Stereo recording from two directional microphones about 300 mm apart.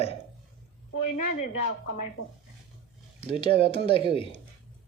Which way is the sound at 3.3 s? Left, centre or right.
Centre.